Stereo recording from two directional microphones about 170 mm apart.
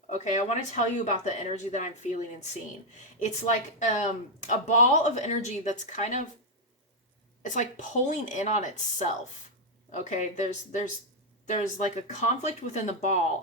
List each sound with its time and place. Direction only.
0.1 s speech: 45° left (ahead or behind)
7.4 s speech: 45° left (ahead or behind)